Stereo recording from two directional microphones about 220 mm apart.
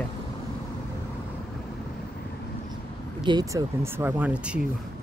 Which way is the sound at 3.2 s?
15° right (ahead or behind).